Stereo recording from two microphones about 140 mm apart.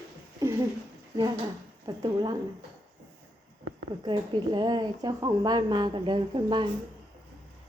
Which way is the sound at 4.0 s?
30° right (ahead or behind).